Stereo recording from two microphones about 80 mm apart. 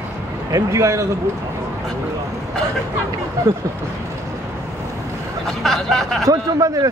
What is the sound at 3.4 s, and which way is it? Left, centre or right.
Speech, right.